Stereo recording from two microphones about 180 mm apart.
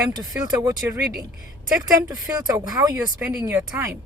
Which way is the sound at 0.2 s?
20° right (ahead or behind).